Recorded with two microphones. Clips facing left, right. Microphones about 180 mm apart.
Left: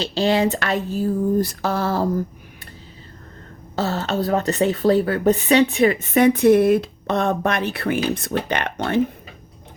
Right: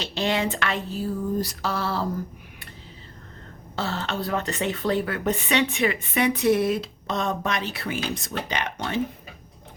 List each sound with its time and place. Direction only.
0.0 s speech: 30° left (ahead or behind)
3.8 s speech: 40° left (ahead or behind); by 9.0 s 60° left (ahead or behind)